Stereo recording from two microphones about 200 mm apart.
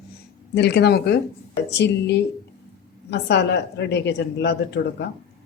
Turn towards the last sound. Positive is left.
turn(degrees=55)  # may be behind; listen again after turning